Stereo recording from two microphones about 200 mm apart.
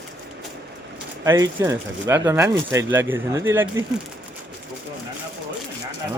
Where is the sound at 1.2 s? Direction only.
15° right (ahead or behind).